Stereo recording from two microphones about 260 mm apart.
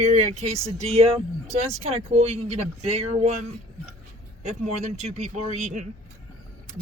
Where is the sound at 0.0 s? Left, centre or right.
Right.